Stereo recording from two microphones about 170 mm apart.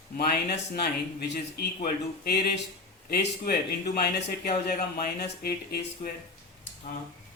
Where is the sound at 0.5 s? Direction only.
70° left (ahead or behind).